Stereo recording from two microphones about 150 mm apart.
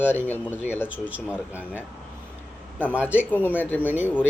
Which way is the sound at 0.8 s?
10° right (ahead or behind).